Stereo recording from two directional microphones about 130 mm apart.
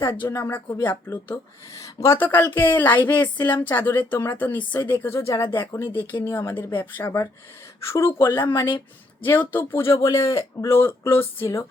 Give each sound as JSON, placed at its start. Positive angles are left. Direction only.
{"t": 0.0, "sound": "speech", "side_deg": 20}